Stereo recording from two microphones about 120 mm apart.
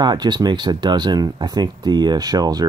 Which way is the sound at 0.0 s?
35° right (ahead or behind).